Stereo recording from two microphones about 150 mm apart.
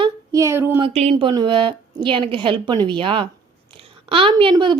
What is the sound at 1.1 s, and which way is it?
A woman's voice, 30° right (ahead or behind).